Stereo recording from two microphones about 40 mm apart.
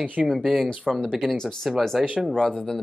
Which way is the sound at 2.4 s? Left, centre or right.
Centre.